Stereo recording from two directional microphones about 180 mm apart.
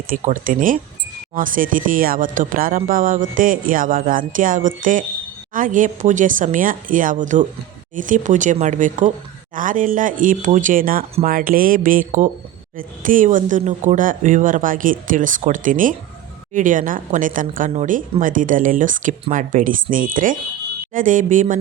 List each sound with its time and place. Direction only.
0.1 s speech: 50° right (ahead or behind)